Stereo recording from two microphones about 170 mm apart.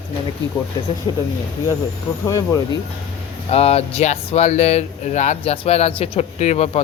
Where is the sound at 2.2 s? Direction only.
20° left (ahead or behind).